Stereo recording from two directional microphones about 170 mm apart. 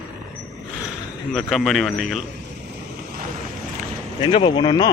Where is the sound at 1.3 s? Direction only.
Centre (ahead or behind).